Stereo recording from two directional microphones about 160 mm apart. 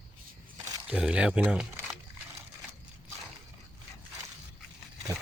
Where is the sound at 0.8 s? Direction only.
5° right (ahead or behind).